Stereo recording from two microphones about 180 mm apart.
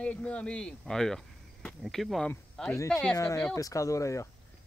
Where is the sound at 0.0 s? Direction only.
5° left (ahead or behind).